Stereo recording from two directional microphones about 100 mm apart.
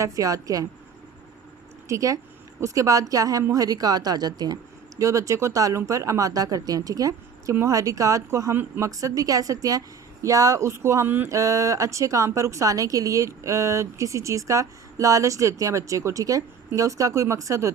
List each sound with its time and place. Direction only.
0.0 s a woman's voice: 35° right (ahead or behind)
1.9 s a woman's voice: 35° right (ahead or behind)
8.5 s speech: 20° right (ahead or behind)
8.9 s a woman's voice: 35° right (ahead or behind)
11.3 s a woman's voice: 30° right (ahead or behind)